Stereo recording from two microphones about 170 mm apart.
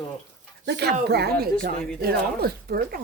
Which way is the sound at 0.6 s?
85° right.